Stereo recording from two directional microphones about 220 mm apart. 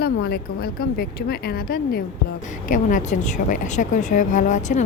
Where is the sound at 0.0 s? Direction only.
45° left (ahead or behind).